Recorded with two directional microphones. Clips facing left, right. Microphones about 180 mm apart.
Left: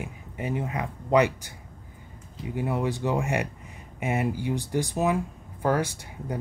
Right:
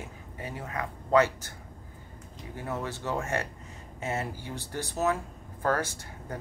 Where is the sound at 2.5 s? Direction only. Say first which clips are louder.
Left 7 dB; 15° left (ahead or behind).